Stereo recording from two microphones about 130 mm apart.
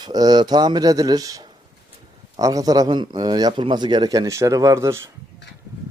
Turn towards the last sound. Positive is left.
turn(degrees=-20)  # may be behind; listen again after turning